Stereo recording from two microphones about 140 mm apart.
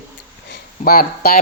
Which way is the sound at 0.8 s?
90° left.